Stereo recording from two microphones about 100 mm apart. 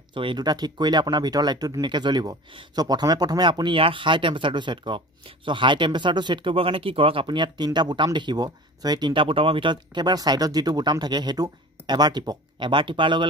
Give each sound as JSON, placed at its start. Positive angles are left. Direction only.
{"t": 0.1, "sound": "speech", "side_deg": -55}
{"t": 0.5, "sound": "speech", "side_deg": -45}